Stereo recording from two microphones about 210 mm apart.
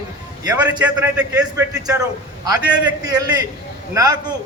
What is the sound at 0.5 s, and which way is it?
A man's voice, 10° right (ahead or behind).